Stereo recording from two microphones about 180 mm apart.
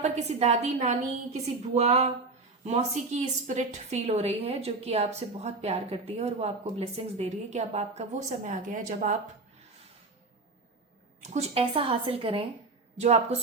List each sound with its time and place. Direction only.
0.0 s a woman's voice: 35° right (ahead or behind)
8.4 s a woman's voice: 50° right (ahead or behind)
11.2 s a woman's voice: 35° right (ahead or behind)